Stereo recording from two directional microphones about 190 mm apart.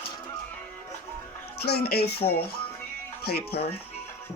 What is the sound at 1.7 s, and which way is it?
Speech, 55° left (ahead or behind).